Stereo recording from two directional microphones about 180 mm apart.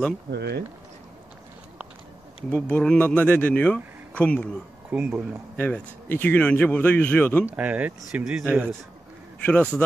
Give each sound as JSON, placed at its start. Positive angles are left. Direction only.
{"t": 0.3, "sound": "speech", "side_deg": -65}
{"t": 2.5, "sound": "speech", "side_deg": 5}
{"t": 4.9, "sound": "speech", "side_deg": -10}
{"t": 5.6, "sound": "speech", "side_deg": 10}
{"t": 7.5, "sound": "speech", "side_deg": -10}
{"t": 9.4, "sound": "speech", "side_deg": 10}